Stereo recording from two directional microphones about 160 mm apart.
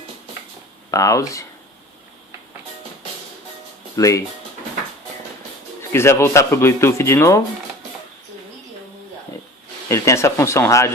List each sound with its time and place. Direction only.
0.9 s speech: 20° left (ahead or behind)
3.9 s speech: 20° left (ahead or behind)
5.9 s speech: 15° left (ahead or behind)
9.9 s speech: 15° left (ahead or behind)